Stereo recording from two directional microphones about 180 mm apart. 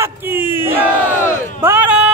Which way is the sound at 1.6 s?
10° right (ahead or behind).